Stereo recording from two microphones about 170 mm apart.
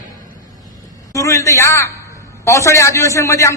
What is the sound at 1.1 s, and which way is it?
A man's voice, 20° left (ahead or behind).